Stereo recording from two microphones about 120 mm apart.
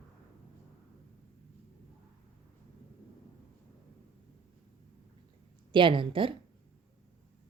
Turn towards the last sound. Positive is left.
turn(degrees=-45)  # may be behind; listen again after turning